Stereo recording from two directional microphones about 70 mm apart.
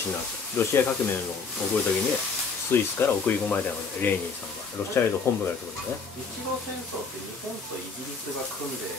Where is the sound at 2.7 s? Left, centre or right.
Left.